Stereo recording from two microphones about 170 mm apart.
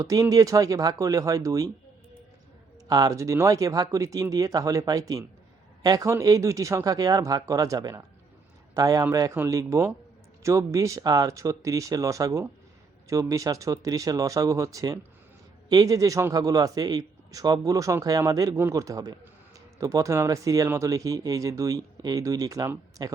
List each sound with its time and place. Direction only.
0.0 s a man's voice: 20° right (ahead or behind)
2.8 s a man's voice: 20° right (ahead or behind)